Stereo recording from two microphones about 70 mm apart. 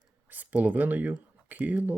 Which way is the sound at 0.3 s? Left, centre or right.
Right.